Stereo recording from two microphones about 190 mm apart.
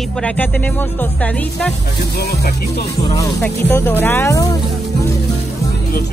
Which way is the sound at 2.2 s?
55° left (ahead or behind).